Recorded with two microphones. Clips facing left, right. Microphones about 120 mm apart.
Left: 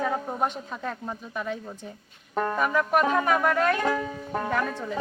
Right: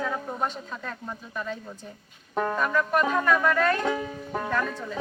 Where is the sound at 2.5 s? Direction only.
15° left (ahead or behind).